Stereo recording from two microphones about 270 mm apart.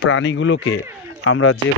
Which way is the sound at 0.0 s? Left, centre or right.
Left.